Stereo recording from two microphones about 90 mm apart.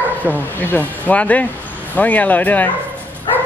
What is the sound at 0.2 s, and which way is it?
Speech, 20° left (ahead or behind).